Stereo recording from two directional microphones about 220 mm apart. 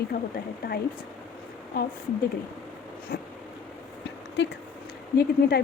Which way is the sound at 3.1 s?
45° left (ahead or behind).